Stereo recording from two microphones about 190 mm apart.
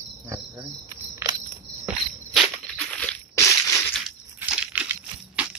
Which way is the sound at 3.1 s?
15° left (ahead or behind).